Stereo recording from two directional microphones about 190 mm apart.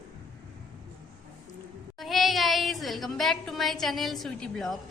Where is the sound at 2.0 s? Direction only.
Centre (ahead or behind).